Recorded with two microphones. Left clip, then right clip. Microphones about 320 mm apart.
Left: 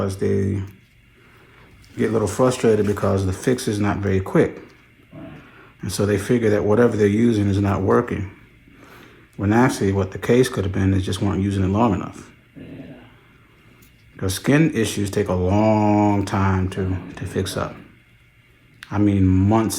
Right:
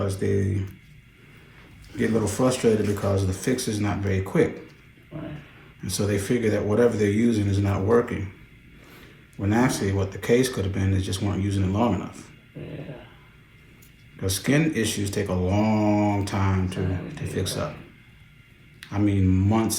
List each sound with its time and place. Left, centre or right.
0.0 s speech: centre
2.0 s speech: centre
5.8 s speech: centre
9.4 s speech: left
14.2 s speech: centre
18.8 s speech: centre